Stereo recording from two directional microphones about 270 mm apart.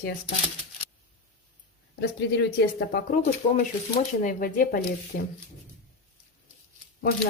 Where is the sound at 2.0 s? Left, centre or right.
Left.